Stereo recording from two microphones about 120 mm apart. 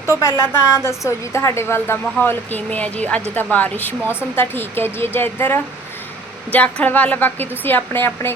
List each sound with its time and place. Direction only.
0.2 s a woman's voice: 20° left (ahead or behind)